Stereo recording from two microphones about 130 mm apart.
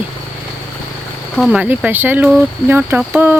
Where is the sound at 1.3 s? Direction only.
5° right (ahead or behind).